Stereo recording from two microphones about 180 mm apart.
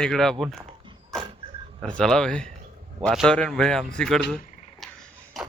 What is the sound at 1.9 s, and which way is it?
Speech, 5° left (ahead or behind).